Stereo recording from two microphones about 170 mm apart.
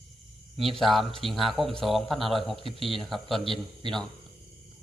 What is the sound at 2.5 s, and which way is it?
Speech, 30° left (ahead or behind).